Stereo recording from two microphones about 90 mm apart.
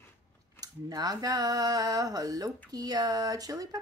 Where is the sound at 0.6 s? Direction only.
45° right (ahead or behind).